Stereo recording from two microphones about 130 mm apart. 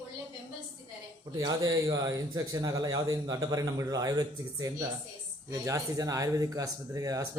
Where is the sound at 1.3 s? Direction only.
30° right (ahead or behind).